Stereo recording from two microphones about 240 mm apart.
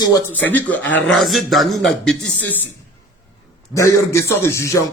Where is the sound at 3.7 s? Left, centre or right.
Centre.